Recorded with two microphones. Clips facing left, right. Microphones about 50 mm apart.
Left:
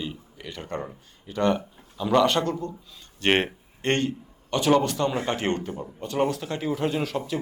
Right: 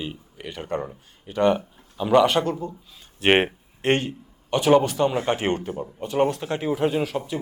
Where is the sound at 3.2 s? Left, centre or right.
Centre.